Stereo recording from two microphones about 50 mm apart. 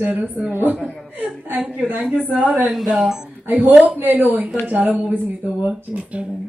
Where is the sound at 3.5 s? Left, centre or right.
Right.